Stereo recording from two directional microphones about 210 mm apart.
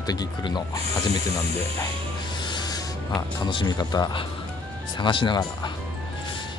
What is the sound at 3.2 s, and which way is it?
Speech, 20° left (ahead or behind).